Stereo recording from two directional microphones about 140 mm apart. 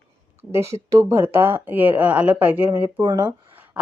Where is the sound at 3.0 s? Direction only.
25° right (ahead or behind).